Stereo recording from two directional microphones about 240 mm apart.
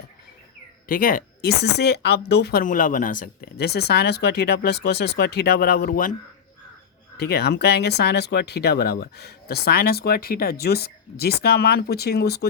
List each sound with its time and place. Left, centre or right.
0.9 s speech: left
7.2 s speech: left